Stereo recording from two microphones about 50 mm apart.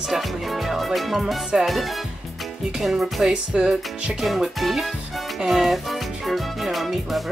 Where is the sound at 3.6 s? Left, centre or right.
Right.